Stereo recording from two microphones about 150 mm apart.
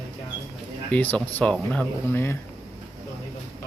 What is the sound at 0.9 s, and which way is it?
Speech, 10° left (ahead or behind).